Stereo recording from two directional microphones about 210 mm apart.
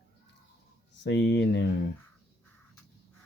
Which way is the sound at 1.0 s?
55° left (ahead or behind).